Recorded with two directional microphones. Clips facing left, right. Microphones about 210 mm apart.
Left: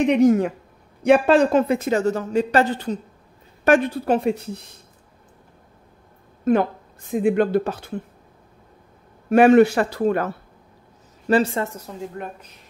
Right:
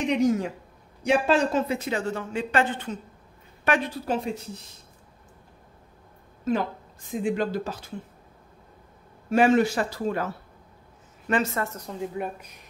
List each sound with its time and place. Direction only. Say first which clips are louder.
0.0 s a woman's voice: left 7 dB; 60° left (ahead or behind); by 3.0 s 35° left (ahead or behind)
3.6 s speech: left 8 dB; 50° left (ahead or behind)
6.4 s speech: left 7 dB; 60° left (ahead or behind)
9.3 s speech: left 7 dB; 60° left (ahead or behind)
11.2 s a woman's voice: left 7 dB; 35° left (ahead or behind)
11.6 s a woman's voice: left 3 dB; 10° left (ahead or behind)
12.0 s speech: right 2 dB; 5° right (ahead or behind)